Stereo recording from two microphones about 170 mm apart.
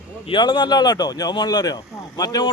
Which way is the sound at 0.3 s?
25° left (ahead or behind).